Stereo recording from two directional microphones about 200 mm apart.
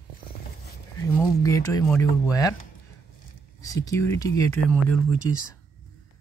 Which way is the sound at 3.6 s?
15° left (ahead or behind).